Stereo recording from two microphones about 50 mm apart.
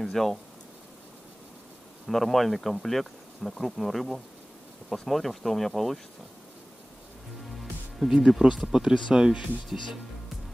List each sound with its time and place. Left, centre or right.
0.0 s speech: centre
2.0 s speech: centre
8.1 s speech: centre